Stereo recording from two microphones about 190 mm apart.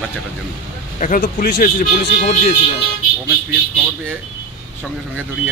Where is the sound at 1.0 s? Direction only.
45° left (ahead or behind).